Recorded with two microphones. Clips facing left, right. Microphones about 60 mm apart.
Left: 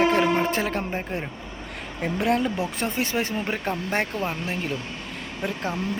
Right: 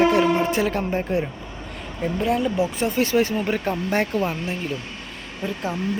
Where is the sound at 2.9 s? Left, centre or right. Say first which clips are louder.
Right 8 dB; left.